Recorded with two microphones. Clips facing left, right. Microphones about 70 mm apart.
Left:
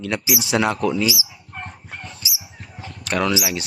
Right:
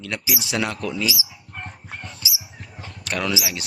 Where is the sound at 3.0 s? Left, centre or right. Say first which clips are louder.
Left 5 dB; centre.